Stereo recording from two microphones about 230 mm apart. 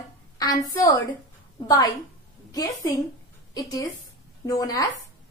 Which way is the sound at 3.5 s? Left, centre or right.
Centre.